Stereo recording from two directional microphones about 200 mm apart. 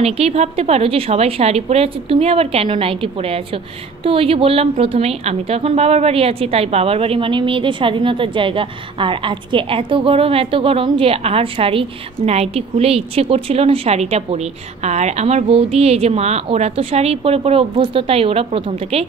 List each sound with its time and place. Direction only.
0.0 s a woman's voice: 30° right (ahead or behind)